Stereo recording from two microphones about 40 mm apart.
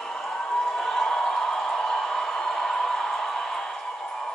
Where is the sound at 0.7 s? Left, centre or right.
Centre.